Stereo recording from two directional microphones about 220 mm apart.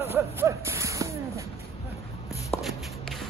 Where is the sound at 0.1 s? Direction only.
10° right (ahead or behind).